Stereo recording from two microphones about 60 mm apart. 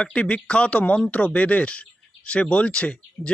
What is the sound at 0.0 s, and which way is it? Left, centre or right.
Speech, centre.